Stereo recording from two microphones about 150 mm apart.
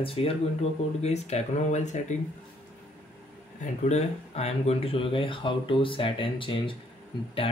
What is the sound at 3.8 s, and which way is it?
Speech, 45° left (ahead or behind).